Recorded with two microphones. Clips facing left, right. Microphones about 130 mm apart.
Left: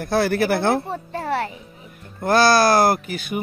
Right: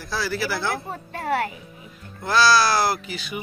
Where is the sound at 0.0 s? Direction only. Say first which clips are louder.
Left 8 dB; 55° left (ahead or behind).